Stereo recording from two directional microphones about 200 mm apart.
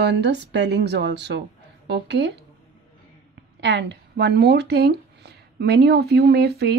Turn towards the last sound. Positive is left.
turn(degrees=-55)  # may be behind; listen again after turning